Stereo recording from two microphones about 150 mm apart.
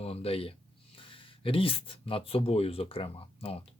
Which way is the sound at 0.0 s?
40° left (ahead or behind).